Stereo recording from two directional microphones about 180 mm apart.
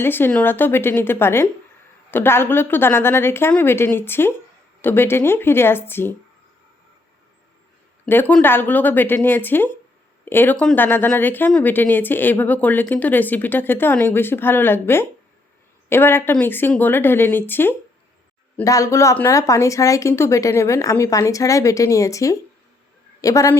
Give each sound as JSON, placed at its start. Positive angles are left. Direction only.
{"t": 0.0, "sound": "speech", "side_deg": 10}
{"t": 8.0, "sound": "speech", "side_deg": 10}